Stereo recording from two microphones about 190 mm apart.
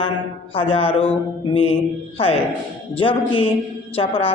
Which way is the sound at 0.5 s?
30° left (ahead or behind).